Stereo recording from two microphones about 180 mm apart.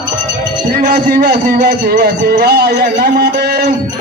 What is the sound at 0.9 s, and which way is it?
Music, 60° right (ahead or behind).